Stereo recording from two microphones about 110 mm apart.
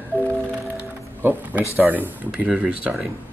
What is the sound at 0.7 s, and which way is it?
Music, 15° right (ahead or behind).